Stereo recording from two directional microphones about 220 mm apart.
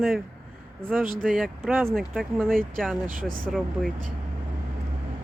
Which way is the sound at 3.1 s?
40° right (ahead or behind).